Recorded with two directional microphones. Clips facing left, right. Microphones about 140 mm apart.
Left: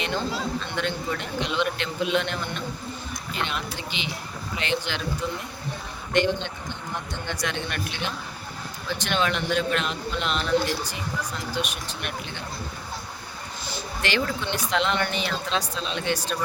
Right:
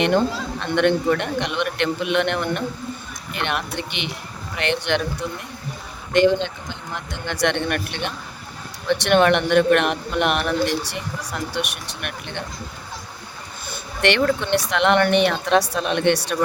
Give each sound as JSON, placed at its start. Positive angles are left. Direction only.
{"t": 0.0, "sound": "speech", "side_deg": -60}
{"t": 6.1, "sound": "speech", "side_deg": -90}
{"t": 13.7, "sound": "a sound", "side_deg": -60}
{"t": 14.7, "sound": "speech", "side_deg": -65}